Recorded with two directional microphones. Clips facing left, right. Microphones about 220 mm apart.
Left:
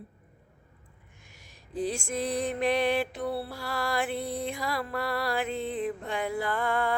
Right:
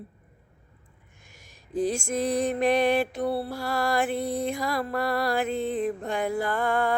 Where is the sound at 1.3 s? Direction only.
45° right (ahead or behind).